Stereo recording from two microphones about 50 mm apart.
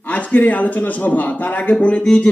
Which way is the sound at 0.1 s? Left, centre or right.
Left.